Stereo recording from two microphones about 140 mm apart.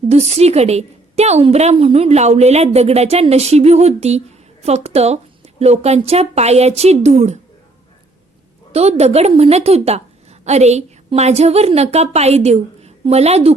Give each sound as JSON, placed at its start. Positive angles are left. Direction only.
{"t": 0.1, "sound": "a woman's voice", "side_deg": -50}
{"t": 8.7, "sound": "a woman's voice", "side_deg": -50}